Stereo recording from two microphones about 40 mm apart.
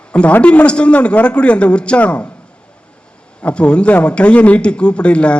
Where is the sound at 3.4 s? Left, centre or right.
Left.